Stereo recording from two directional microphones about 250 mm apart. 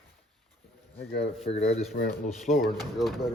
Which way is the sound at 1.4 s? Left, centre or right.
Left.